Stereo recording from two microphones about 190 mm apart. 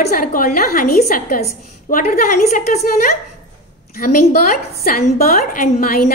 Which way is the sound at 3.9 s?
50° left (ahead or behind).